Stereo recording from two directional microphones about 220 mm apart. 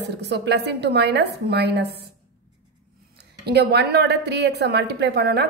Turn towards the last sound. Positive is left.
turn(degrees=-50)  # may be behind; listen again after turning